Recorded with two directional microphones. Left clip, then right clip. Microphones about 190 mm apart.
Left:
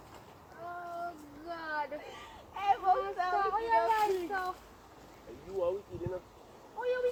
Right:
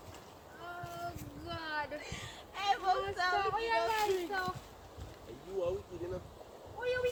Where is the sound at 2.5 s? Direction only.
5° right (ahead or behind).